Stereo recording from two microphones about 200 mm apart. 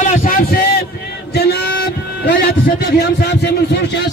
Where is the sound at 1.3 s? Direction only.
55° left (ahead or behind).